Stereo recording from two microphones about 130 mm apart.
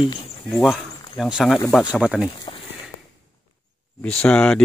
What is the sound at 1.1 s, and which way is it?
Speech, centre (ahead or behind).